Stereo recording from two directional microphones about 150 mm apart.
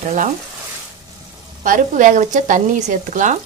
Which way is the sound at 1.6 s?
60° right (ahead or behind).